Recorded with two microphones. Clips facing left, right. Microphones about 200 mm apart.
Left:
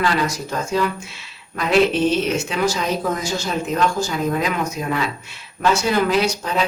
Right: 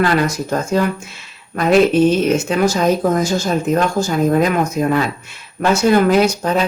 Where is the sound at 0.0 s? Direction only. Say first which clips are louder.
Right 5 dB; 50° right (ahead or behind).